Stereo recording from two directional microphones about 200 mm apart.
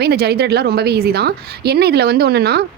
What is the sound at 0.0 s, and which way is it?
Speech, 55° right (ahead or behind).